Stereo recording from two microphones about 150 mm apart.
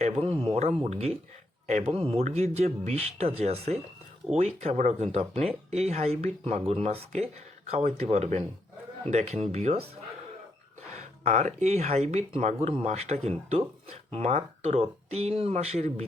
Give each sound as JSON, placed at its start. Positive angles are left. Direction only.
{"t": 0.0, "sound": "a sound", "side_deg": -40}
{"t": 0.9, "sound": "speech", "side_deg": -45}
{"t": 11.2, "sound": "speech", "side_deg": -50}